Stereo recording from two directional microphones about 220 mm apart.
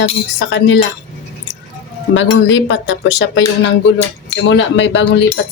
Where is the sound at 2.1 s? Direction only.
55° left (ahead or behind).